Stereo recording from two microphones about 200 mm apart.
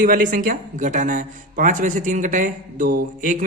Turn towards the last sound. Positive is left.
turn(degrees=-45)  # may be behind; listen again after turning